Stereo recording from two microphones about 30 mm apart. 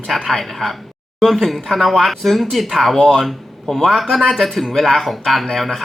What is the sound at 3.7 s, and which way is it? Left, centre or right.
Speech, centre.